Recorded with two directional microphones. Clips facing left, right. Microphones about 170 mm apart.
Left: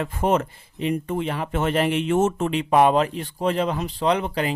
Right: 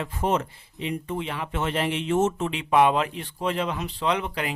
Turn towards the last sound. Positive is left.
turn(degrees=35)  # may be behind; listen again after turning